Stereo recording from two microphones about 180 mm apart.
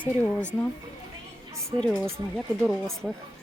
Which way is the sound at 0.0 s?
10° left (ahead or behind).